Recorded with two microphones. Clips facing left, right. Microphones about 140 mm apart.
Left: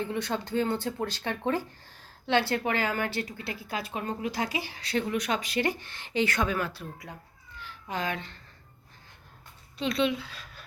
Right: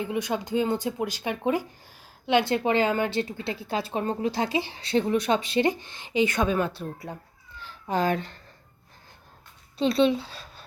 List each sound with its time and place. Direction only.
0.0 s a woman's voice: 15° right (ahead or behind); by 8.4 s 40° right (ahead or behind)
9.7 s speech: 30° right (ahead or behind)